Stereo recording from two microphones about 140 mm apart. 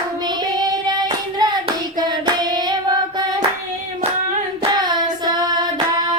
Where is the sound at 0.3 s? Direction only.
30° right (ahead or behind).